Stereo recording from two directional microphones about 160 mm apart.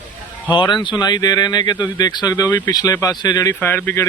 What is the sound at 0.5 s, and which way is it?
Speech, 30° left (ahead or behind).